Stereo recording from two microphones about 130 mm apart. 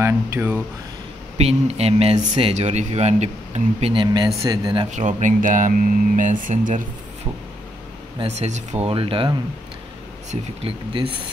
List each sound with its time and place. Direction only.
0.0 s speech: 20° right (ahead or behind)
1.4 s speech: 50° right (ahead or behind)
2.5 s speech: 60° right (ahead or behind)
3.9 s speech: 35° right (ahead or behind)
4.9 s speech: 70° right (ahead or behind)
8.2 s speech: 60° right (ahead or behind); by 9.3 s 45° right (ahead or behind)
10.9 s speech: 40° right (ahead or behind)